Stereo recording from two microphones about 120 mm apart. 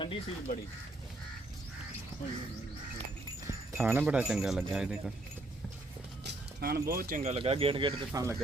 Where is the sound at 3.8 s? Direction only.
15° right (ahead or behind).